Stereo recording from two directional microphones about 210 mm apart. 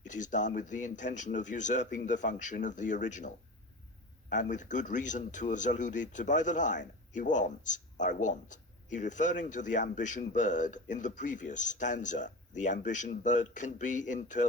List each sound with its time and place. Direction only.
0.1 s speech: 35° left (ahead or behind)